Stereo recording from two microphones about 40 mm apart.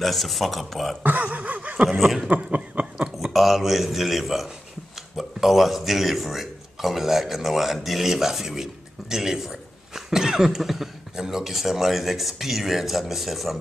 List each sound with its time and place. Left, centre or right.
0.0 s speech: centre
1.0 s speech: right
1.9 s speech: centre
2.2 s a sound: right
3.2 s speech: centre